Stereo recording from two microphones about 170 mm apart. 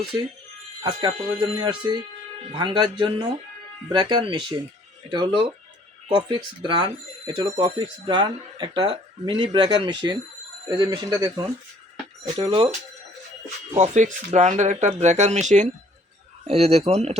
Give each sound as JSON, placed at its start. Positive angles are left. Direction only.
{"t": 0.1, "sound": "speech", "side_deg": -20}
{"t": 12.4, "sound": "speech", "side_deg": -35}
{"t": 13.7, "sound": "speech", "side_deg": -45}